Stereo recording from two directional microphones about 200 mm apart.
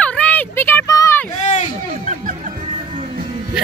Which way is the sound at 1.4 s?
35° left (ahead or behind).